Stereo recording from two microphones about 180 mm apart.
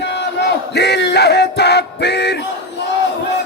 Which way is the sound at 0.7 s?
65° left (ahead or behind).